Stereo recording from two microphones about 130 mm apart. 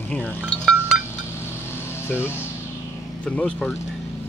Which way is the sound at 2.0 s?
15° left (ahead or behind).